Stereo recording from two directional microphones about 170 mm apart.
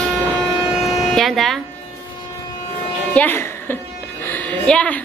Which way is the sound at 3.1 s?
15° left (ahead or behind).